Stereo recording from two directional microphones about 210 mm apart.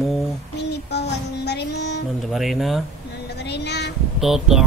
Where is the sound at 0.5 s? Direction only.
55° left (ahead or behind).